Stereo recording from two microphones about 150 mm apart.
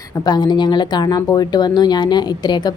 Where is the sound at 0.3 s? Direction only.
30° left (ahead or behind).